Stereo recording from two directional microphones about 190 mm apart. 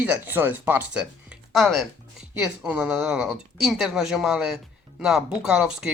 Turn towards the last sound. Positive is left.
turn(degrees=-5)  # may be behind; listen again after turning